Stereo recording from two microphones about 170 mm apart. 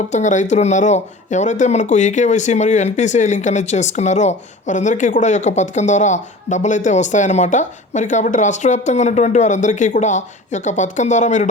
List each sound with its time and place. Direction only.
0.1 s speech: 45° left (ahead or behind)